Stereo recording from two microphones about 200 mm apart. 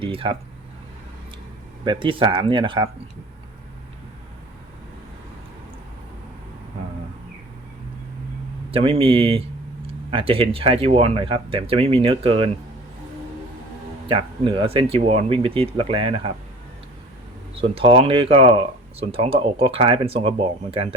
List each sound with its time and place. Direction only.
0.0 s speech: 25° right (ahead or behind)
1.8 s speech: 25° right (ahead or behind)
8.7 s speech: 25° right (ahead or behind)
14.1 s speech: 25° right (ahead or behind)
17.6 s speech: 25° right (ahead or behind)